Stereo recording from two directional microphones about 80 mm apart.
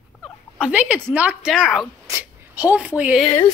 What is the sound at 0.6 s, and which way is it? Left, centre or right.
Speech, centre.